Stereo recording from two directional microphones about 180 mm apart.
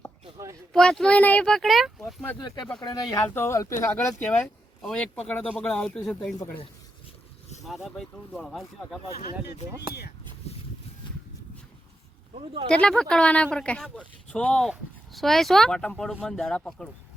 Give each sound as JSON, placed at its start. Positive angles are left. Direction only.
{"t": 0.7, "sound": "speech", "side_deg": 5}
{"t": 2.8, "sound": "speech", "side_deg": 20}
{"t": 7.6, "sound": "speech", "side_deg": 0}
{"t": 10.5, "sound": "a sound", "side_deg": 35}
{"t": 12.6, "sound": "speech", "side_deg": 5}